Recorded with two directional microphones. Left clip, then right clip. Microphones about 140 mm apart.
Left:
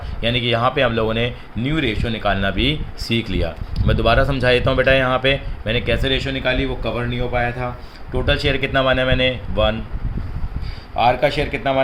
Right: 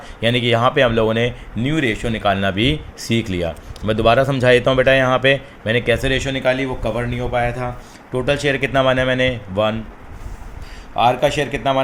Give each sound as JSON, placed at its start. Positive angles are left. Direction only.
{"t": 0.2, "sound": "speech", "side_deg": -40}
{"t": 8.1, "sound": "speech", "side_deg": -35}
{"t": 10.9, "sound": "speech", "side_deg": -25}